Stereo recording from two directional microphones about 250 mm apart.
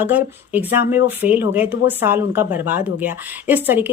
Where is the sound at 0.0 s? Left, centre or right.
Centre.